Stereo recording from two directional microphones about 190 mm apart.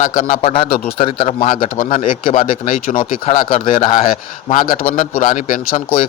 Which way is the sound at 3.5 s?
45° left (ahead or behind).